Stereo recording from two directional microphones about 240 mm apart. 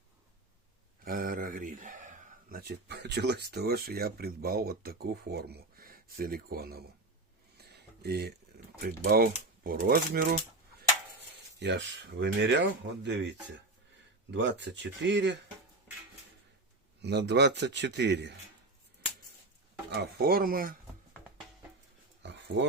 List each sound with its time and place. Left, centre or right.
1.0 s a sound: right
2.5 s speech: right
11.6 s speech: right
14.3 s speech: right
17.0 s speech: right
19.9 s speech: right
22.2 s dog: right